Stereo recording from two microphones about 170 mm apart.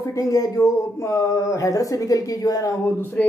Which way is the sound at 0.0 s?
20° left (ahead or behind).